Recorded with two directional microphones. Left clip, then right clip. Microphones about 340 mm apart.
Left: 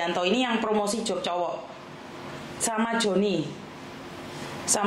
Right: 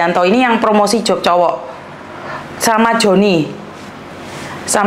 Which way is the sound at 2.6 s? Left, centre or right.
Right.